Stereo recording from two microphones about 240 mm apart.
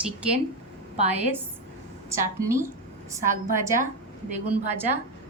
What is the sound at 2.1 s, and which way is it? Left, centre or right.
Speech, centre.